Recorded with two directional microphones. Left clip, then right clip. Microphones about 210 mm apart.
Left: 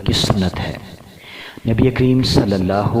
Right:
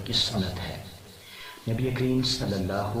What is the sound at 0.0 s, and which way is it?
Speech, 35° left (ahead or behind).